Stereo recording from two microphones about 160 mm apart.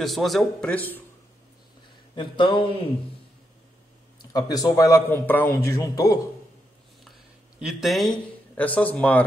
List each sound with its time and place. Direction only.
0.0 s speech: centre (ahead or behind)
2.1 s speech: 30° left (ahead or behind)
4.3 s a man's voice: 25° left (ahead or behind)
7.1 s a sound: centre (ahead or behind)
8.5 s speech: 10° left (ahead or behind)